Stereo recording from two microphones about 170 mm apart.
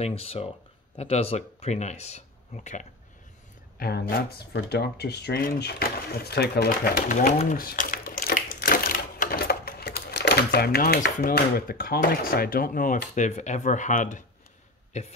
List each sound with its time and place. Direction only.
0.0 s speech: 35° left (ahead or behind)
3.8 s speech: 60° left (ahead or behind); by 15.1 s 40° left (ahead or behind)